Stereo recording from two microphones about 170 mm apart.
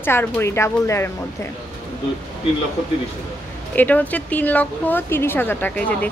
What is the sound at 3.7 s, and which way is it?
A woman's voice, 10° left (ahead or behind).